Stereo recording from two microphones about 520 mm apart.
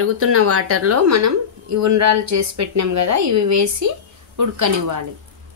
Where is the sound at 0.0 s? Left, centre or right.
Right.